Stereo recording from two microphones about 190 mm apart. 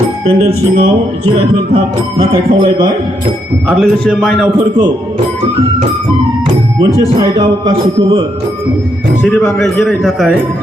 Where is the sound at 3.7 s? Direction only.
Centre (ahead or behind).